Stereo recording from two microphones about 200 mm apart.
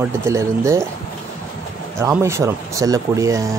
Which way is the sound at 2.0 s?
15° right (ahead or behind).